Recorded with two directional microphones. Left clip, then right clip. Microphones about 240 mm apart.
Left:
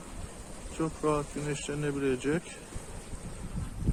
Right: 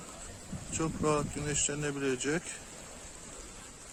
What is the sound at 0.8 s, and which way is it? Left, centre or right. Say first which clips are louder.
Speech: left 1 dB; centre.